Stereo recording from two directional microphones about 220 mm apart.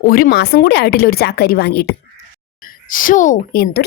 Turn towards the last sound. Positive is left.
turn(degrees=45)  # may be behind; listen again after turning